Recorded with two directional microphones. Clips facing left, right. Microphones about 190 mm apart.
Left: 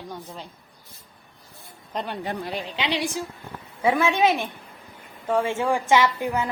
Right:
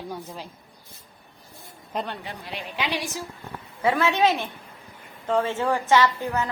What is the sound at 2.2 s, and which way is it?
Speech, 50° left (ahead or behind).